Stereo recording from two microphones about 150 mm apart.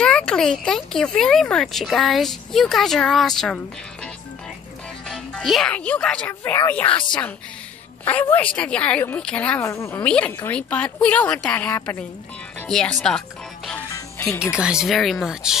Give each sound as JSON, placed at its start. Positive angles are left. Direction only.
{"t": 0.0, "sound": "speech", "side_deg": 5}
{"t": 5.0, "sound": "speech", "side_deg": 0}
{"t": 8.0, "sound": "speech", "side_deg": 15}
{"t": 13.8, "sound": "music", "side_deg": 20}
{"t": 14.4, "sound": "speech", "side_deg": -5}